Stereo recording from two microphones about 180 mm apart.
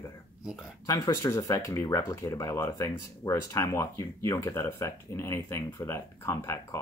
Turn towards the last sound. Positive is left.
turn(degrees=15)  # may be behind; listen again after turning